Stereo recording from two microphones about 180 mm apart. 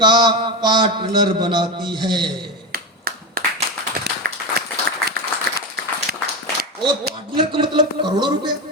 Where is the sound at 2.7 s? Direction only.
55° right (ahead or behind).